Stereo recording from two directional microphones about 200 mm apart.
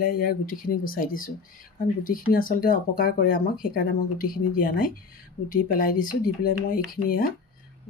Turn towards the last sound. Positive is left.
turn(degrees=45)  # may be behind; listen again after turning